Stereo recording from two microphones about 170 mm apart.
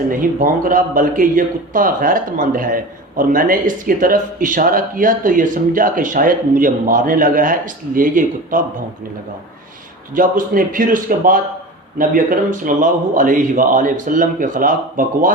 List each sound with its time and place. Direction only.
0.1 s speech: 50° right (ahead or behind)
10.2 s speech: 50° right (ahead or behind)